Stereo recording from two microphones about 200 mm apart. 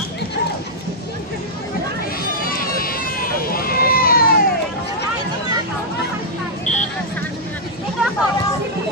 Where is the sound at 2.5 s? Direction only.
45° left (ahead or behind).